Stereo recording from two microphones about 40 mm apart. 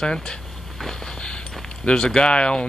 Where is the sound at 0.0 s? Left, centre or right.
Centre.